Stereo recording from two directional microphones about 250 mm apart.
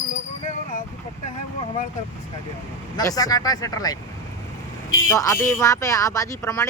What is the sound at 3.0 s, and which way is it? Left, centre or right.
Speech, centre.